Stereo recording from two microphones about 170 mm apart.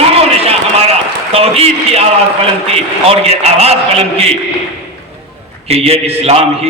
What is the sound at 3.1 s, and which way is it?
A man's voice, 40° right (ahead or behind).